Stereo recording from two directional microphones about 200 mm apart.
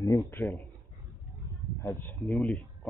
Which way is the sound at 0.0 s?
20° left (ahead or behind).